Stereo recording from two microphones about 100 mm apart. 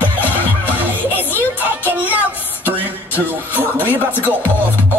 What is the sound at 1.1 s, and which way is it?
Music, 20° left (ahead or behind).